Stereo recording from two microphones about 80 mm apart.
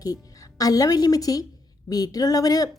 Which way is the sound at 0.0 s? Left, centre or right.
Left.